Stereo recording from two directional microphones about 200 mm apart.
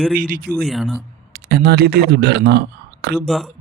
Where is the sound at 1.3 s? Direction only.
50° right (ahead or behind).